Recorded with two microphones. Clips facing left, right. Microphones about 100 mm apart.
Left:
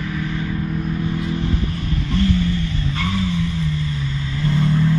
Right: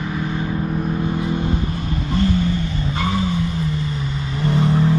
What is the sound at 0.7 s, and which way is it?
Vehicle, 30° right (ahead or behind).